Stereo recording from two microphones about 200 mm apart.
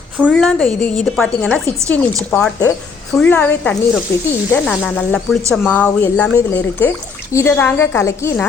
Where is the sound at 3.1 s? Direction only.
5° left (ahead or behind).